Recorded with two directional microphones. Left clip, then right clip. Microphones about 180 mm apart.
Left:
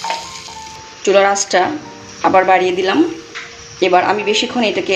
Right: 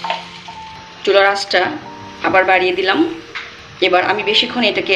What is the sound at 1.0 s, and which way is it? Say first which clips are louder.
Speech: left 1 dB; 35° left (ahead or behind).